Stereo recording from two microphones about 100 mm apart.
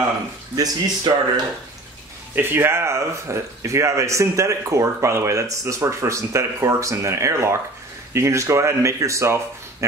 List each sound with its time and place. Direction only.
0.6 s speech: 45° right (ahead or behind)
2.3 s speech: 20° right (ahead or behind)